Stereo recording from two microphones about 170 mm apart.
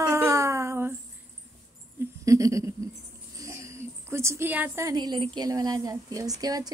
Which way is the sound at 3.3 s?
20° right (ahead or behind).